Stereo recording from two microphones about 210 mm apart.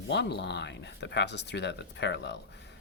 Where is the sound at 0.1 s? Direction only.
55° left (ahead or behind).